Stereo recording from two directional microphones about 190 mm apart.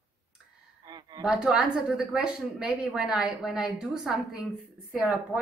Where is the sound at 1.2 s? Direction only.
5° right (ahead or behind).